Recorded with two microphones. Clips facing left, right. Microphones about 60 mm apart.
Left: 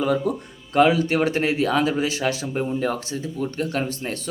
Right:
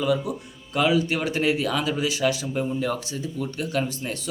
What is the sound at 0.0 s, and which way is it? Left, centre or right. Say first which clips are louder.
Speech: left 2 dB; left.